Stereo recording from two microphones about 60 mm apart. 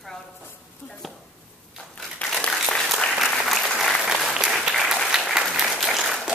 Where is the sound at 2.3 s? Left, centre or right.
Centre.